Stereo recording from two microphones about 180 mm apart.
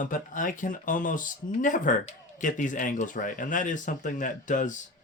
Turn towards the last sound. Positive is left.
turn(degrees=45)  # may be behind; listen again after turning